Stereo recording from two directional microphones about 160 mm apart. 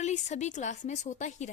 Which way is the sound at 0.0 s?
45° left (ahead or behind).